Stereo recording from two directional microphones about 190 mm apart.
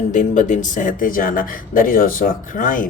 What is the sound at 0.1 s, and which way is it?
Speech, 40° left (ahead or behind).